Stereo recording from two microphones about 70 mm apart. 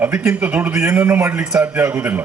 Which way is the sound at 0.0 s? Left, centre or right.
Right.